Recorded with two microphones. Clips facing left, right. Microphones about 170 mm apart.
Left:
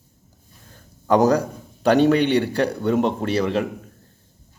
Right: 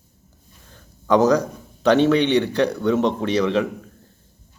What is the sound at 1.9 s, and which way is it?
Speech, 40° left (ahead or behind).